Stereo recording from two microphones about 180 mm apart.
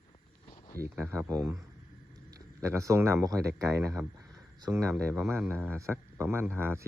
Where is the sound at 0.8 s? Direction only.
15° right (ahead or behind).